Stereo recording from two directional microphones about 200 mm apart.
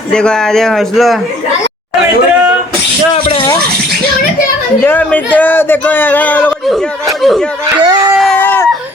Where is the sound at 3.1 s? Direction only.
25° left (ahead or behind).